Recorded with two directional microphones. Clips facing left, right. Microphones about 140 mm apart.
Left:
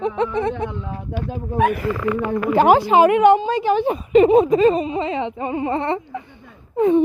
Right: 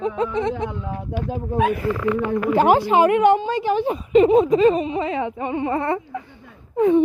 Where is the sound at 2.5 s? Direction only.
90° left; by 4.6 s 60° left (ahead or behind).